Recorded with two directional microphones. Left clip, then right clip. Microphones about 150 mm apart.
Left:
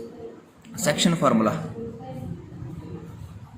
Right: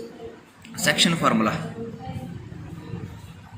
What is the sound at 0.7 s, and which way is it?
Speech, 60° left (ahead or behind).